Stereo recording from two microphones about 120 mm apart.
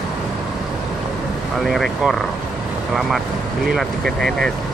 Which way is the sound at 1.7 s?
Centre (ahead or behind).